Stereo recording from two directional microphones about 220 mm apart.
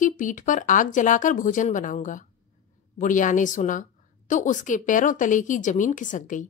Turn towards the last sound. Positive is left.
turn(degrees=35)  # may be behind; listen again after turning